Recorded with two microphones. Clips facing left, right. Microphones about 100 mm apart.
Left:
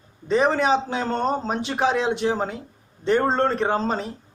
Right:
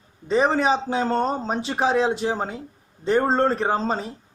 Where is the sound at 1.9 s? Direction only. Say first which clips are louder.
Right 2 dB; 35° right (ahead or behind).